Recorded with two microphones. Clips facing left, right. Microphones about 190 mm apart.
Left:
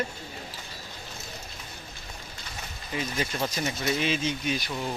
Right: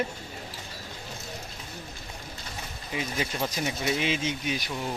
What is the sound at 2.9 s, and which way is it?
Speech, 10° right (ahead or behind).